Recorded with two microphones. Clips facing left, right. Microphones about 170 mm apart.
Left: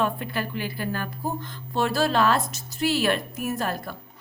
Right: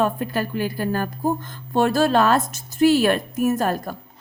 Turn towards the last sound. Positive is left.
turn(degrees=-45)  # may be behind; listen again after turning